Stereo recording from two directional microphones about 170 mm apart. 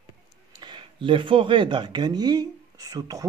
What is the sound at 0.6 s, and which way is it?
Speech, 30° right (ahead or behind).